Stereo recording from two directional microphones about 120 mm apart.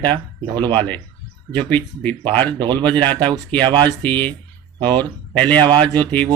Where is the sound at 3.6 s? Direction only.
40° right (ahead or behind).